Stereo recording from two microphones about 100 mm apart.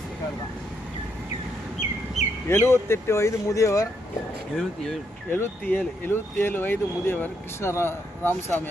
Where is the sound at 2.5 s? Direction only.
25° left (ahead or behind).